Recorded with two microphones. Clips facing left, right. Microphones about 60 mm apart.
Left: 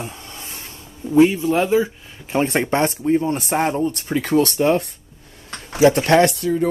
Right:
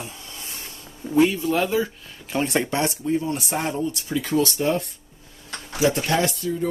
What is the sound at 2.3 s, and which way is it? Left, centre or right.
Speech, left.